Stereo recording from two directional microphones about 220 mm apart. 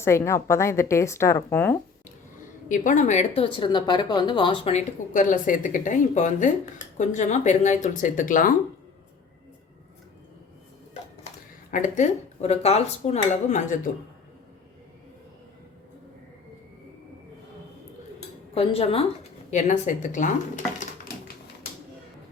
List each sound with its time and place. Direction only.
0.0 s speech: 10° left (ahead or behind)
2.6 s speech: 35° left (ahead or behind)
11.7 s speech: 35° left (ahead or behind)
18.5 s speech: 25° left (ahead or behind)